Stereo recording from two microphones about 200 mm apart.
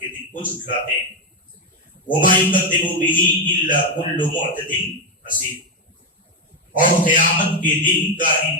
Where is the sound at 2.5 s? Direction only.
40° left (ahead or behind).